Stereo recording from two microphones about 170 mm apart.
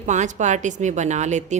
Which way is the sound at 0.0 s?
45° right (ahead or behind).